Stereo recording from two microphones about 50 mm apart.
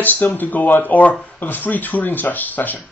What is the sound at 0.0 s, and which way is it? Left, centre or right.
Speech, left.